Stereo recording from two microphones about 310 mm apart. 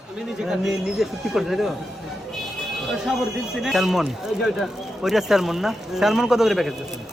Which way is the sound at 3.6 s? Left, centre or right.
Centre.